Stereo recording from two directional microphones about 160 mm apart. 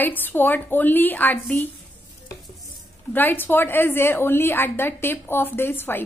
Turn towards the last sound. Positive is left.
turn(degrees=15)  # may be behind; listen again after turning